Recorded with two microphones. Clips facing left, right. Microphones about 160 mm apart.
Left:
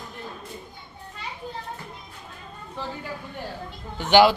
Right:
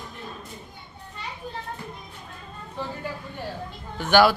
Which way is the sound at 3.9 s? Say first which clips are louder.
Left 2 dB; 20° left (ahead or behind).